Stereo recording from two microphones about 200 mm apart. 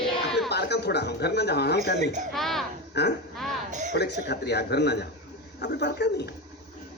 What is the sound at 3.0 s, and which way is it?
A man's voice, 55° left (ahead or behind).